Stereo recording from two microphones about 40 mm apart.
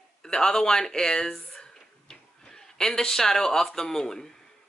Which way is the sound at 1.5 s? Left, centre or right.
Centre.